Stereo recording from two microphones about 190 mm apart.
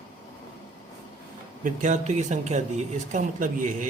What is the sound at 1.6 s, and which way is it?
Speech, 40° right (ahead or behind).